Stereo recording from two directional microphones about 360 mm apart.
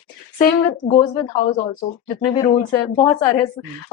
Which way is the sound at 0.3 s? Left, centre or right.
Centre.